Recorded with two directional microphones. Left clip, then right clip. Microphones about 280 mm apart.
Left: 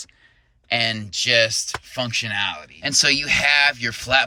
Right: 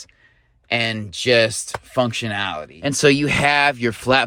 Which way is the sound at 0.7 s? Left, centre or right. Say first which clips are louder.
Even; centre.